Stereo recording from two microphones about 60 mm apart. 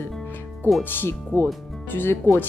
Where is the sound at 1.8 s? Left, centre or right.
Left.